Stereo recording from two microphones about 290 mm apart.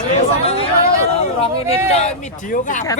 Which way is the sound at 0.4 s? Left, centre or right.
Centre.